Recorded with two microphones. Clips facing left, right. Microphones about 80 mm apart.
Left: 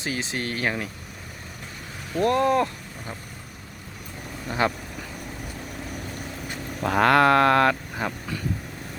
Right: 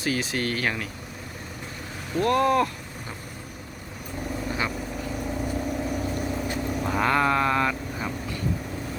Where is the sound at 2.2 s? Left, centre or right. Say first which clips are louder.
Even; left.